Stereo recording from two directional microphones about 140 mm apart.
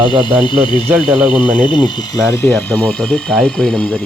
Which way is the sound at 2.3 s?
10° left (ahead or behind).